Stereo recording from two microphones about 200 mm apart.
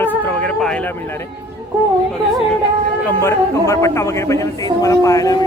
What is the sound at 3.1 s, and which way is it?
Speech, 10° left (ahead or behind).